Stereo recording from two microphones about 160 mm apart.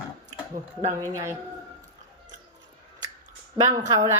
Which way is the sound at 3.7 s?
20° right (ahead or behind).